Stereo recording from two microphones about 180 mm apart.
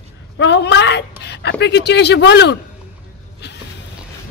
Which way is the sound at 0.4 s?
75° left (ahead or behind).